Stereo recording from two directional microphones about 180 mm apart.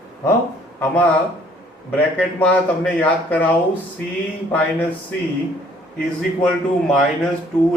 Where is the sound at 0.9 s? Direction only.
10° left (ahead or behind).